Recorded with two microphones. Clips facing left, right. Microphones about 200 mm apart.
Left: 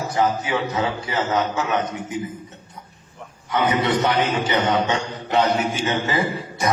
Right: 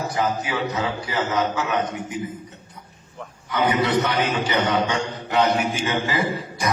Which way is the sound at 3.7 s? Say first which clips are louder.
Even; 25° left (ahead or behind).